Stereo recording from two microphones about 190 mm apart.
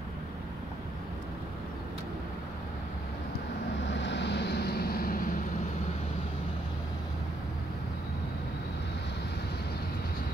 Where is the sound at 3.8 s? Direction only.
70° left (ahead or behind); by 5.3 s 50° left (ahead or behind).